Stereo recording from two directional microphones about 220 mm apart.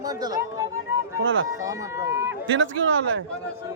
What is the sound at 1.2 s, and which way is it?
Speech, 65° right (ahead or behind).